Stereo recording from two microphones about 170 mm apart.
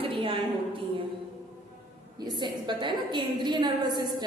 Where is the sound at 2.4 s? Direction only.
25° right (ahead or behind).